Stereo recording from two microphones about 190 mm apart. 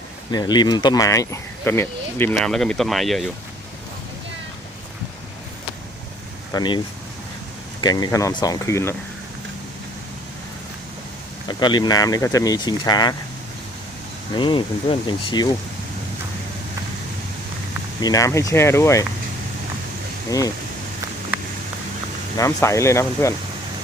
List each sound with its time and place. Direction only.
0.3 s speech: 20° left (ahead or behind); by 3.2 s centre (ahead or behind)
6.5 s speech: 20° left (ahead or behind)
11.4 s speech: 20° left (ahead or behind)
14.3 s speech: 25° left (ahead or behind)
18.0 s speech: 15° left (ahead or behind)
22.4 s speech: 15° left (ahead or behind)